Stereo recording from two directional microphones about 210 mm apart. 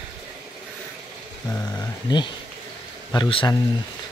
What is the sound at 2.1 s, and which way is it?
Speech, 20° left (ahead or behind).